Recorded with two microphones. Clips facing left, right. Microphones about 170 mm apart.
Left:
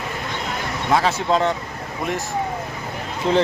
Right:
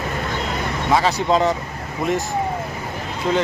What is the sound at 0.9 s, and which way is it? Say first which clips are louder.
Speech: right 1 dB; centre (ahead or behind).